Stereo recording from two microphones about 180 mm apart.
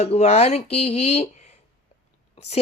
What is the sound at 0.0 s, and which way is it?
Speech, 35° left (ahead or behind).